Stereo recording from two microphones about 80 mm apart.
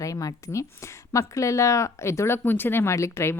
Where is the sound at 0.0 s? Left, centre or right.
Left.